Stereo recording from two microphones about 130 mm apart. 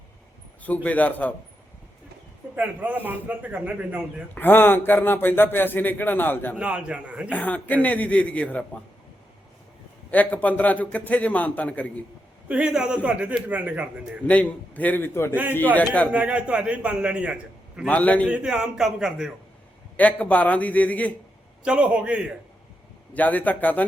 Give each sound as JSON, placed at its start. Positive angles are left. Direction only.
{"t": 0.6, "sound": "speech", "side_deg": 10}
{"t": 2.6, "sound": "a man's voice", "side_deg": -15}
{"t": 4.4, "sound": "speech", "side_deg": 15}
{"t": 6.6, "sound": "a man's voice", "side_deg": -10}
{"t": 7.3, "sound": "speech", "side_deg": 10}
{"t": 10.1, "sound": "speech", "side_deg": 10}
{"t": 12.5, "sound": "a man's voice", "side_deg": -5}
{"t": 14.3, "sound": "speech", "side_deg": 10}
{"t": 16.1, "sound": "a man's voice", "side_deg": -10}
{"t": 17.8, "sound": "speech", "side_deg": 10}
{"t": 18.3, "sound": "speech", "side_deg": -5}
{"t": 20.0, "sound": "speech", "side_deg": 10}
{"t": 21.6, "sound": "a man's voice", "side_deg": -10}
{"t": 23.1, "sound": "speech", "side_deg": 10}